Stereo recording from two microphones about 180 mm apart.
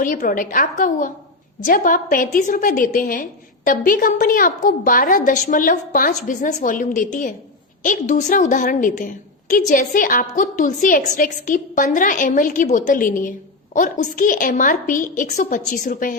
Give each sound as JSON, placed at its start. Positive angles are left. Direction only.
{"t": 0.0, "sound": "a woman's voice", "side_deg": 50}